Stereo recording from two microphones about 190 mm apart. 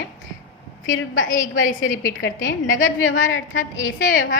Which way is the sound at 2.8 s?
90° left.